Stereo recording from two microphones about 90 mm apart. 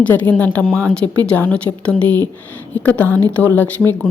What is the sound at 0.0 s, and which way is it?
A woman's voice, 15° left (ahead or behind).